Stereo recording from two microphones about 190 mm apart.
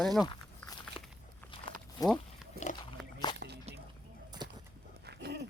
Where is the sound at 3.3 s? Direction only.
20° left (ahead or behind).